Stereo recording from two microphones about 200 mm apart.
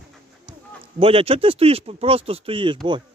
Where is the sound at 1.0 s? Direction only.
30° right (ahead or behind).